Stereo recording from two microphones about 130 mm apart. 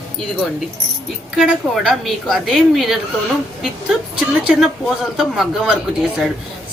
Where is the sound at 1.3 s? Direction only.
5° right (ahead or behind).